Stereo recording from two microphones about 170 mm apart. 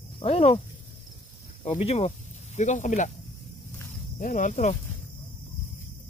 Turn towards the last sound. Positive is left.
turn(degrees=45)  # may be behind; listen again after turning